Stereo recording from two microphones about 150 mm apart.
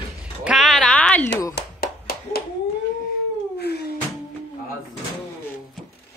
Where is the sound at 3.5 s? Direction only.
90° left.